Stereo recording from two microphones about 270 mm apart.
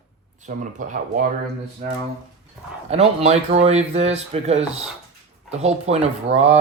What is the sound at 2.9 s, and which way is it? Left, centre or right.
Speech, right.